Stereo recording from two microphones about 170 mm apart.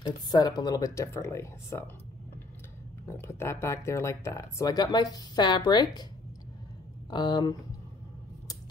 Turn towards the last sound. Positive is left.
turn(degrees=25)  # may be behind; listen again after turning